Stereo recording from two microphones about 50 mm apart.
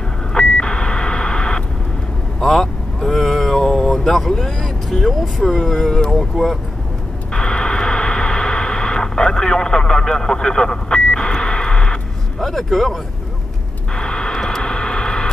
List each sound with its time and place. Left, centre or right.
0.3 s beep: centre
2.4 s vehicle: centre
6.1 s speech: centre
7.3 s radio: centre
12.4 s speech: centre
13.9 s vehicle: centre